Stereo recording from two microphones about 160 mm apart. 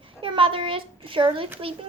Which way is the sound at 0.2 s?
30° right (ahead or behind).